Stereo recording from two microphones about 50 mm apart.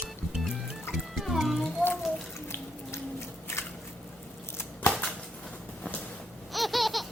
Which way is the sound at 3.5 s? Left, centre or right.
Left.